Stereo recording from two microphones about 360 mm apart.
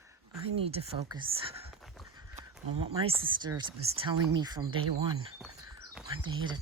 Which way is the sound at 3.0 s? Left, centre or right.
Centre.